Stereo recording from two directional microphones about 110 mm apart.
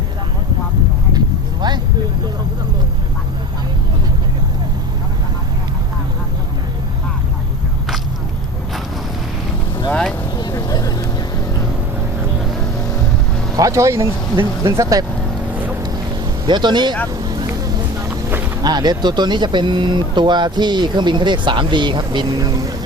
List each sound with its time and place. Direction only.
1.6 s vehicle: 40° right (ahead or behind)
9.9 s vehicle: 10° left (ahead or behind)
10.3 s vehicle: 35° left (ahead or behind)
13.6 s speech: 30° right (ahead or behind)
16.5 s speech: 45° right (ahead or behind)
17.1 s vehicle: 40° right (ahead or behind)
18.3 s boat: 20° right (ahead or behind)
18.6 s speech: 40° right (ahead or behind)